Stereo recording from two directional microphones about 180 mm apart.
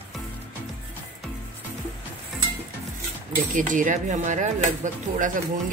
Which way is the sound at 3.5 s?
45° right (ahead or behind).